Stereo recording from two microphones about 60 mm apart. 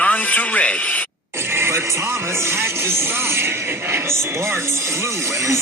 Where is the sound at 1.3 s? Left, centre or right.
Right.